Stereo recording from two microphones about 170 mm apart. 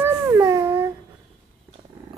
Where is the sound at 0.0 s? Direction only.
15° right (ahead or behind).